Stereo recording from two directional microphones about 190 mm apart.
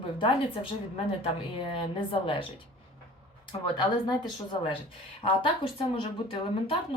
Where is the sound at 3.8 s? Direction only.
25° left (ahead or behind).